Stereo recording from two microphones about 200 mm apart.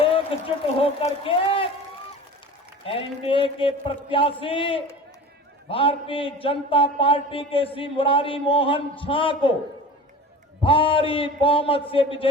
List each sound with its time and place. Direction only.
0.0 s a man's voice: 25° left (ahead or behind)
2.8 s a man's voice: 25° left (ahead or behind)
10.6 s a man's voice: 25° left (ahead or behind)